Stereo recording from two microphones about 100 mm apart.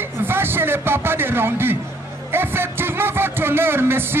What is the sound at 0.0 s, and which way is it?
A man's voice, 20° right (ahead or behind).